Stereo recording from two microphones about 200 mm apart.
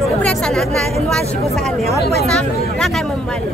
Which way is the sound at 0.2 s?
5° left (ahead or behind).